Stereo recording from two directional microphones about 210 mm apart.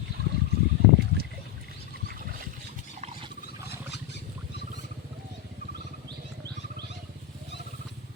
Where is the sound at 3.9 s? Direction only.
55° left (ahead or behind).